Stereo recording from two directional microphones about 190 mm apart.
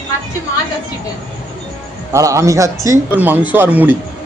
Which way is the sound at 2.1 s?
15° right (ahead or behind).